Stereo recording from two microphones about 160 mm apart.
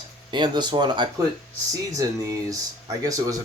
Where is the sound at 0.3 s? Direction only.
30° right (ahead or behind).